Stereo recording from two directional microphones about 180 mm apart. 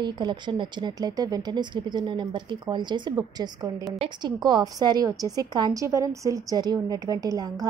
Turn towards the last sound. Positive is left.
turn(degrees=-20)  # may be behind; listen again after turning